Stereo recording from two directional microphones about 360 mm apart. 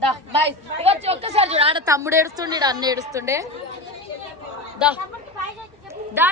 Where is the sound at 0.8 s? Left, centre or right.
Centre.